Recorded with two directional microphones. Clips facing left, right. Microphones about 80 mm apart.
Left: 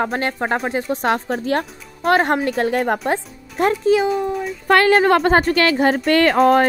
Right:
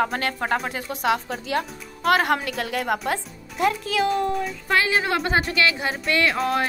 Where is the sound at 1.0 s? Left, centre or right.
Left.